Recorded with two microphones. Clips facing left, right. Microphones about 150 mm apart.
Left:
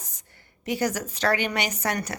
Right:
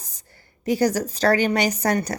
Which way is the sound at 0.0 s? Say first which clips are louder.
Even; 35° right (ahead or behind).